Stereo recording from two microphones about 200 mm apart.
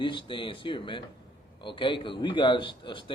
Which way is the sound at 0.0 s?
25° left (ahead or behind).